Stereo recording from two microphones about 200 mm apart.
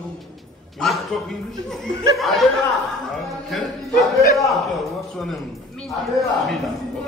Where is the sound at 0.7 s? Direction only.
Centre (ahead or behind).